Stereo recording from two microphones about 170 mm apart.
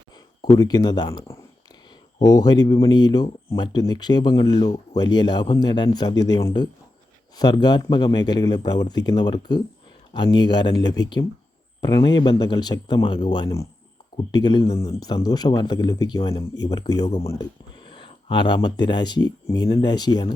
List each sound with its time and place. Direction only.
0.5 s speech: 20° left (ahead or behind)